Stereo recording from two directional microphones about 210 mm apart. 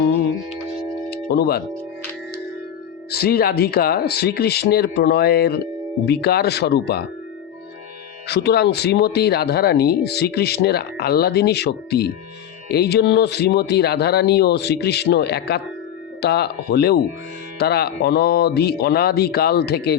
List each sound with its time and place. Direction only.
1.1 s speech: 50° left (ahead or behind)
3.1 s speech: 45° left (ahead or behind)
8.3 s speech: 50° left (ahead or behind)